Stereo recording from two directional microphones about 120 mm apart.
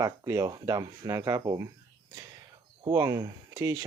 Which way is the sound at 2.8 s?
30° right (ahead or behind).